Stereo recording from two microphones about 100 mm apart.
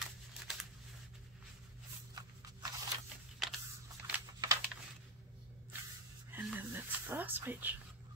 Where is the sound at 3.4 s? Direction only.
5° right (ahead or behind).